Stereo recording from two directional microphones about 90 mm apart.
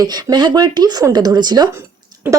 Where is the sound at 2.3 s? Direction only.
20° right (ahead or behind).